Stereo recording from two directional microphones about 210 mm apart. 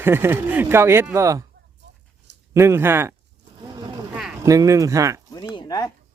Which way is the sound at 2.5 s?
10° right (ahead or behind).